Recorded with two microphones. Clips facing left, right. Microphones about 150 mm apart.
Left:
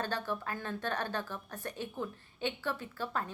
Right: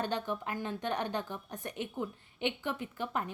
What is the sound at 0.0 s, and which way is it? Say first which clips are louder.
A woman's voice: right 2 dB; 20° right (ahead or behind).